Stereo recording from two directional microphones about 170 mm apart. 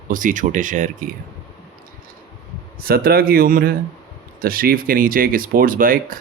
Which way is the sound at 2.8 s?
60° right (ahead or behind).